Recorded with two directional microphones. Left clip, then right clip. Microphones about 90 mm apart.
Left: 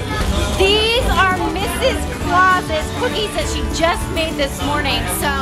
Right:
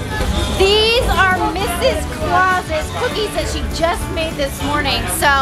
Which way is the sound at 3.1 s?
5° right (ahead or behind).